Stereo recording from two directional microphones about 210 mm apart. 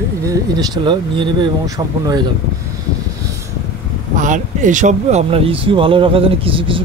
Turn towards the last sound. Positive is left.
turn(degrees=-25)  # may be behind; listen again after turning